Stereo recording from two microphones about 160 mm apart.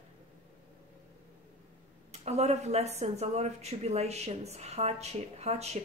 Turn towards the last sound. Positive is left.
turn(degrees=-40)  # may be behind; listen again after turning